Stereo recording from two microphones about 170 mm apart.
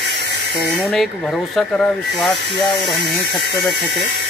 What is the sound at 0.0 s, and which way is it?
Hiss, 80° right.